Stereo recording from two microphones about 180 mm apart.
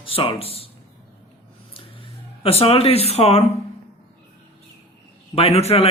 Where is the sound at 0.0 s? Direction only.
30° left (ahead or behind).